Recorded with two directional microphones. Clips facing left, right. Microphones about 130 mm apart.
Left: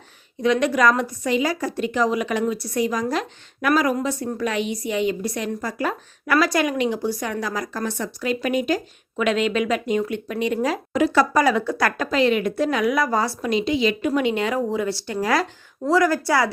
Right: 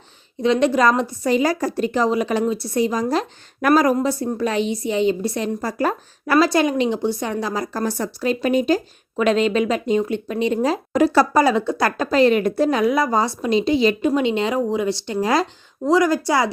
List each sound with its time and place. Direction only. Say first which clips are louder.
0.4 s a woman's voice: right 2 dB; 30° right (ahead or behind)
12.1 s a woman's voice: right 5 dB; 40° right (ahead or behind)
14.1 s a woman's voice: right 2 dB; 25° right (ahead or behind)